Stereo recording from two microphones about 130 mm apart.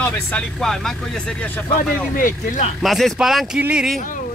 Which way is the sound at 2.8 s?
Centre (ahead or behind).